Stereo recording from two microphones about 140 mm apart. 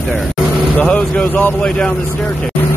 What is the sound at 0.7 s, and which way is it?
Speech, 5° left (ahead or behind).